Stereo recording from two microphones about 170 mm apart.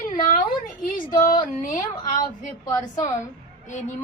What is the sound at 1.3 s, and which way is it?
Female singing, 50° left (ahead or behind).